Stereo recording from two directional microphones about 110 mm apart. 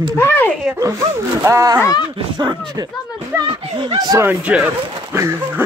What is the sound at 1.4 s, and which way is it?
Speech, 30° right (ahead or behind).